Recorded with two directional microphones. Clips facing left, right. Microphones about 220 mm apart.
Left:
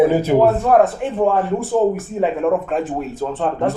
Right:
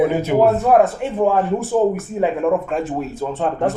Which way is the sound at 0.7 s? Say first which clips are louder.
Even; centre (ahead or behind).